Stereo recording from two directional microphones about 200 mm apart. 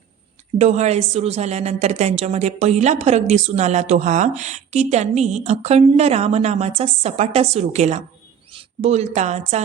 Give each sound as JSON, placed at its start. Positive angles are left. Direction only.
{"t": 0.6, "sound": "a woman's voice", "side_deg": -35}